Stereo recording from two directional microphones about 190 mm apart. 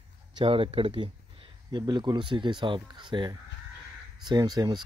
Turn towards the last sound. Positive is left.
turn(degrees=-20)  # may be behind; listen again after turning